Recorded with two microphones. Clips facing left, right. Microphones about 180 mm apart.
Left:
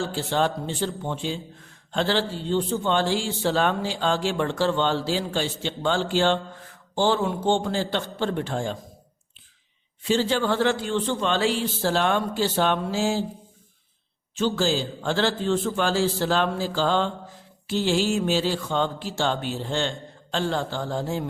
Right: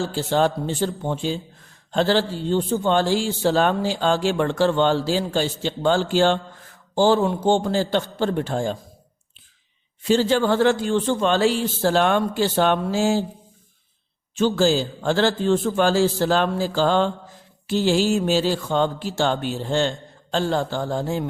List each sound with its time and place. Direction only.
0.2 s a man's voice: 40° right (ahead or behind)
10.1 s a man's voice: 45° right (ahead or behind)
14.3 s a man's voice: 45° right (ahead or behind)